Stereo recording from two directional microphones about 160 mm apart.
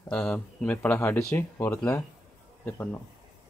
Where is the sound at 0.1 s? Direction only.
5° left (ahead or behind).